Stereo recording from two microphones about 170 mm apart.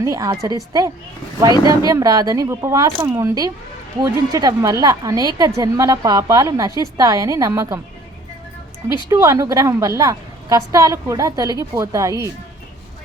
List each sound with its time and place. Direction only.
0.0 s a woman's voice: 20° right (ahead or behind)
9.0 s a woman's voice: 15° right (ahead or behind)